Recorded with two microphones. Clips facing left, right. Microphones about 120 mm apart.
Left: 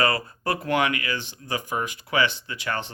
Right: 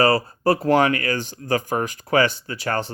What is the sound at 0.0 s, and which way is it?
Speech, 35° right (ahead or behind).